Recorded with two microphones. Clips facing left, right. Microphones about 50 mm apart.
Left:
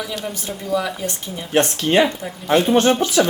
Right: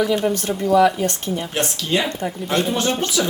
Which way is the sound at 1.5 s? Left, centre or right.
Left.